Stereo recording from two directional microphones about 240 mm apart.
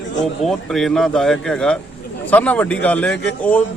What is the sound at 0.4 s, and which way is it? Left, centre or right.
A man's voice, centre.